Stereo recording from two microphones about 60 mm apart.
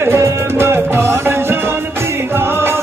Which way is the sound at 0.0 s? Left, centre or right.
Right.